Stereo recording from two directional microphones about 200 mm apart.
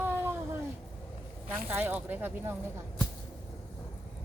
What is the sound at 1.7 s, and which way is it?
Speech, 10° right (ahead or behind).